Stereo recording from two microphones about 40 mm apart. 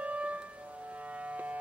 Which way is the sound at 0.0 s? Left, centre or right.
Right.